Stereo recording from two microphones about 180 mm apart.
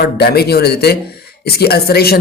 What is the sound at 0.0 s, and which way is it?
Speech, 60° left (ahead or behind).